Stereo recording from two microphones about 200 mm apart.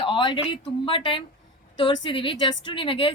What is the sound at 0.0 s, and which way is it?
A woman's voice, 25° left (ahead or behind).